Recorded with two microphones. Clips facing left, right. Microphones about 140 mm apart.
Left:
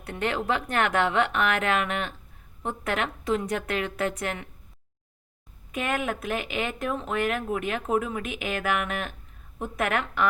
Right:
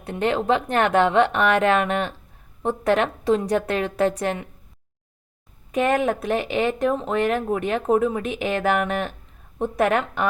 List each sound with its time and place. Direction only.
0.0 s a woman's voice: 25° right (ahead or behind)
1.4 s speech: 35° right (ahead or behind)
5.7 s speech: 35° right (ahead or behind)